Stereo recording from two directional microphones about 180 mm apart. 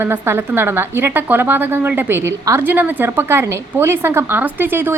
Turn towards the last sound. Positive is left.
turn(degrees=-10)  # may be behind; listen again after turning